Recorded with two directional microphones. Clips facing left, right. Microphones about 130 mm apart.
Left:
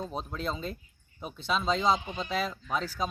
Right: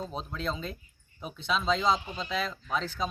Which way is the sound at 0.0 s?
5° left (ahead or behind).